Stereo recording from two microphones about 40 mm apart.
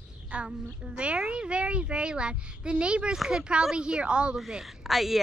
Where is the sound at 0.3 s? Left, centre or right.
Right.